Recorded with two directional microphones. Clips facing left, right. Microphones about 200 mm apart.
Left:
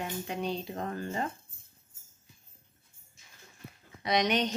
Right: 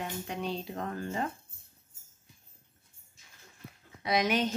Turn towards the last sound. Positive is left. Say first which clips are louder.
# even
turn(degrees=-5)  # may be behind; listen again after turning